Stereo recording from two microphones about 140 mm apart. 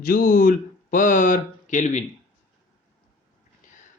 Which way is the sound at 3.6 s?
65° left (ahead or behind).